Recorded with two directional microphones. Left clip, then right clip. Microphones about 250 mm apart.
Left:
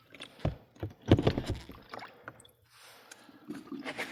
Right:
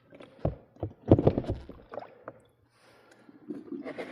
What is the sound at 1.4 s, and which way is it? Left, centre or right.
Rowboat, left.